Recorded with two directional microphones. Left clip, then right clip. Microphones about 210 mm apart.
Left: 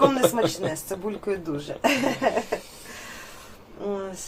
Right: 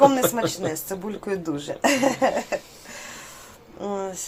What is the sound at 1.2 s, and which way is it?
Speech, 40° right (ahead or behind).